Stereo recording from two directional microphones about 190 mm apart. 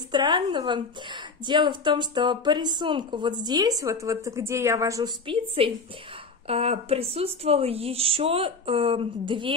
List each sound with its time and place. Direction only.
0.1 s a woman's voice: 25° right (ahead or behind)